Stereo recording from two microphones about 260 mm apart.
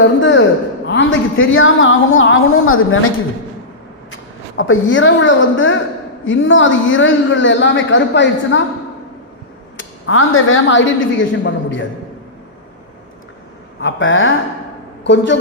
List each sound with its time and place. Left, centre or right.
0.0 s a woman's voice: left
4.1 s a woman's voice: left
9.7 s a woman's voice: left
13.8 s a woman's voice: left